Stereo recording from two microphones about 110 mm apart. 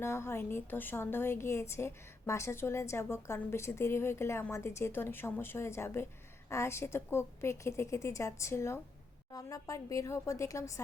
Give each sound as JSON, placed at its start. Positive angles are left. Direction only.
{"t": 0.0, "sound": "a woman's voice", "side_deg": 25}